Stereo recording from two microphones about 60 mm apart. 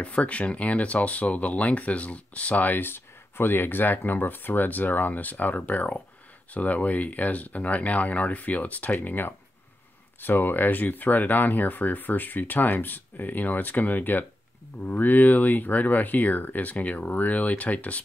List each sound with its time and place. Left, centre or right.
0.0 s speech: left